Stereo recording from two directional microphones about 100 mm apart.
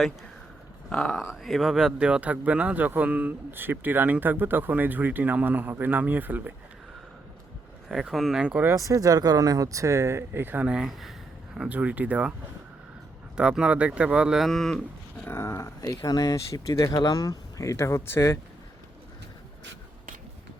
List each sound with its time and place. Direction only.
0.9 s a man's voice: 5° left (ahead or behind); by 6.5 s 20° right (ahead or behind)
7.9 s a man's voice: centre (ahead or behind)
8.6 s a man's voice: 30° right (ahead or behind); by 12.3 s 15° right (ahead or behind)
13.3 s a man's voice: 10° right (ahead or behind)
15.2 s a sound: 25° left (ahead or behind)
16.0 s speech: 40° left (ahead or behind)